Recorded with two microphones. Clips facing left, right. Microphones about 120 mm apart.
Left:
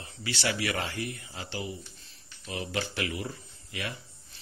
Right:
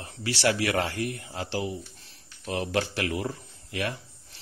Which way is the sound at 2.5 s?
75° right (ahead or behind).